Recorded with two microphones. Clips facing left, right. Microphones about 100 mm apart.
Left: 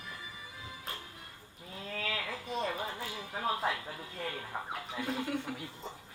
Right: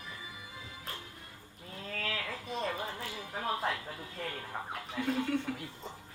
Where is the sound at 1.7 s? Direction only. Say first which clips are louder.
Even; centre (ahead or behind).